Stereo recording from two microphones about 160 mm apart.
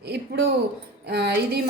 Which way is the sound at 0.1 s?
90° right.